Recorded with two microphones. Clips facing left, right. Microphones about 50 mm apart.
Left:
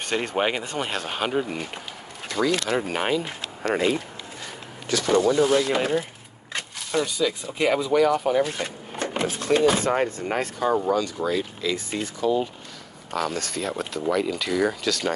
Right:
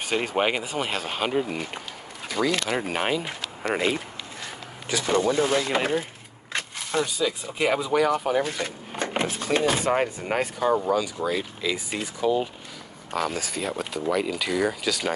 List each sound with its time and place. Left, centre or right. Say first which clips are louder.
0.0 s speech: even; centre
2.2 s a sound: left 1 dB; centre
2.7 s speech: left 2 dB; centre; by 5.9 s right
6.9 s speech: left 2 dB; centre
8.9 s drawer open or close: even; right
9.4 s speech: left 5 dB; centre